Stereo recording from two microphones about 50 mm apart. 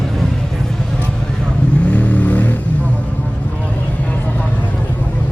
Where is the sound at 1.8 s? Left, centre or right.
Left.